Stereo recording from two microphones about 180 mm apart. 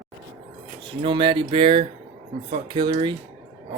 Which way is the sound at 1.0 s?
30° right (ahead or behind).